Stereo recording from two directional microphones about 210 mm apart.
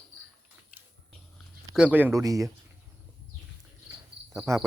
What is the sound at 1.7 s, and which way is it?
Speech, 5° right (ahead or behind).